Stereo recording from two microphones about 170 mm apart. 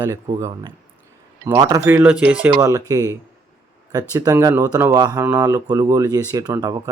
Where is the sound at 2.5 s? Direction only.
15° right (ahead or behind).